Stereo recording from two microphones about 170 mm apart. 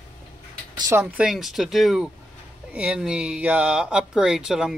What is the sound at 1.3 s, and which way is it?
Speech, centre (ahead or behind).